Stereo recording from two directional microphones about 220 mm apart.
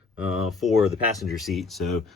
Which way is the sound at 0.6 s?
Centre (ahead or behind).